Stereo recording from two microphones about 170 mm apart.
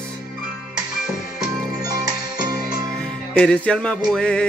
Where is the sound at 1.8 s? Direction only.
20° right (ahead or behind).